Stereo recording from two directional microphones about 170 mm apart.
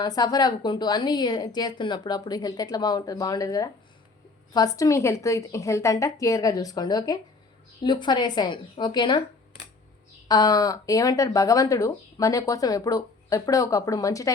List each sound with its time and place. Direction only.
0.0 s speech: 25° left (ahead or behind)
10.2 s speech: 25° left (ahead or behind)